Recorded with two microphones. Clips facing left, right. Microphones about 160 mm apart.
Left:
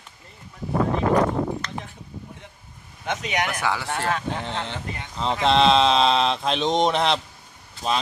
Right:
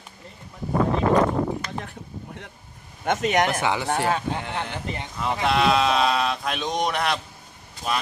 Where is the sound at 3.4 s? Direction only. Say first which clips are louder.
Right 2 dB; 25° right (ahead or behind).